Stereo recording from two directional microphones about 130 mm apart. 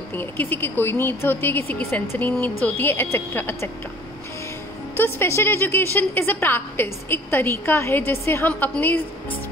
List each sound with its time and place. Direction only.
0.1 s a woman's voice: 15° left (ahead or behind)
4.9 s a woman's voice: 15° left (ahead or behind)